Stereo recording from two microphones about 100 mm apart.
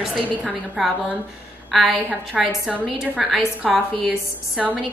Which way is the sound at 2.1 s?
10° right (ahead or behind).